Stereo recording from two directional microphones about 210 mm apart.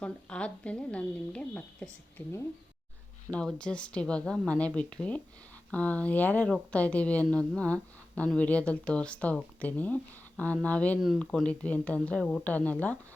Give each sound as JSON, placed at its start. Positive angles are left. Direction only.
{"t": 0.0, "sound": "a woman's voice", "side_deg": 5}